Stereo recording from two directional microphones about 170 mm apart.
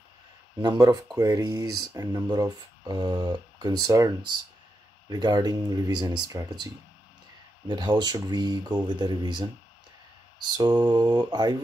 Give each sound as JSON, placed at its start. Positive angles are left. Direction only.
{"t": 0.6, "sound": "speech", "side_deg": -25}